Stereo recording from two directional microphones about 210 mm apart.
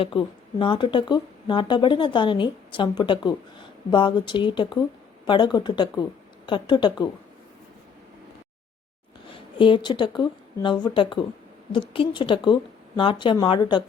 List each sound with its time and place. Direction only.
0.0 s speech: 25° left (ahead or behind)
9.6 s speech: 25° left (ahead or behind)